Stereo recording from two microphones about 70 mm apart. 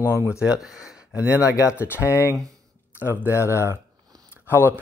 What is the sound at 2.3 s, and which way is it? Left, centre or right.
Speech, right.